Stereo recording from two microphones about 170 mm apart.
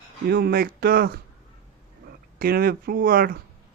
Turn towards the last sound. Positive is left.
turn(degrees=-60)  # may be behind; listen again after turning